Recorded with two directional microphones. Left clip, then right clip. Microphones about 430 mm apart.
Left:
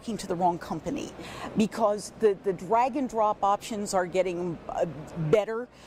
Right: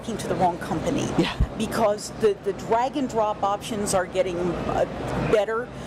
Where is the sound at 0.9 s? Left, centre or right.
Left.